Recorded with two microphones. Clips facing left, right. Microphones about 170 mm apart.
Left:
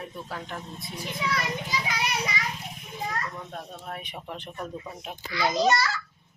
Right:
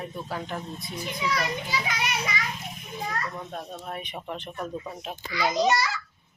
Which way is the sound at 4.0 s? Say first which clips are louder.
Right 3 dB; 10° left (ahead or behind).